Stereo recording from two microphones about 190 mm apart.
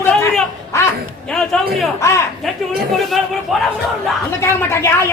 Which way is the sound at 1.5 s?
5° left (ahead or behind).